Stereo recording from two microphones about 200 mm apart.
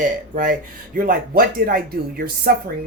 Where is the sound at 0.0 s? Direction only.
40° right (ahead or behind).